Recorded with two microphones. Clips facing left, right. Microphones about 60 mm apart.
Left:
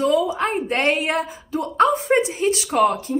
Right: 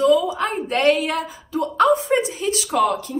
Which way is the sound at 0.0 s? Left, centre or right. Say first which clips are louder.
Right 2 dB; left.